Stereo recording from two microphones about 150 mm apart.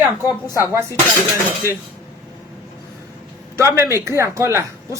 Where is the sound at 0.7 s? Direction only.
20° right (ahead or behind).